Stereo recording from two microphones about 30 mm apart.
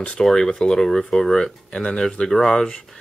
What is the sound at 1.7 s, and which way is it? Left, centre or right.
Speech, left.